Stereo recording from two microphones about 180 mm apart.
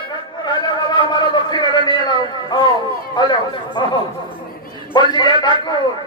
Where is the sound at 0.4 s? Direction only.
25° left (ahead or behind).